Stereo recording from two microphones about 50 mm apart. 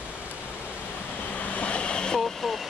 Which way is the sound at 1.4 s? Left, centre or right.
Left.